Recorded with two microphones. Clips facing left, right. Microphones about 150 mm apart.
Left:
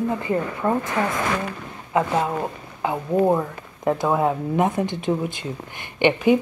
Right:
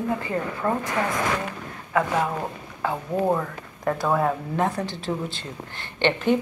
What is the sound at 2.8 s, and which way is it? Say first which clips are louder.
Speech: left 4 dB; 15° left (ahead or behind).